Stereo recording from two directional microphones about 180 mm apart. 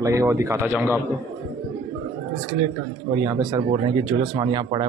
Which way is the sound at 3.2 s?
20° right (ahead or behind).